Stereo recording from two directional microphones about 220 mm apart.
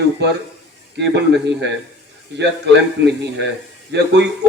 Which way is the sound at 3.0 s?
50° right (ahead or behind).